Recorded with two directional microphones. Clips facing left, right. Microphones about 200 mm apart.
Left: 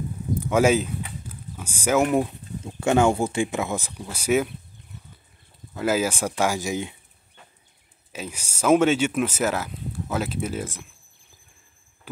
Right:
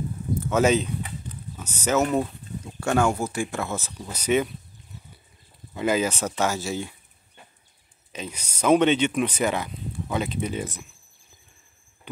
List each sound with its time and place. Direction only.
0.3 s a sound: 15° left (ahead or behind)
2.6 s speech: 20° left (ahead or behind)
5.8 s speech: 5° left (ahead or behind)
8.1 s speech: 5° left (ahead or behind)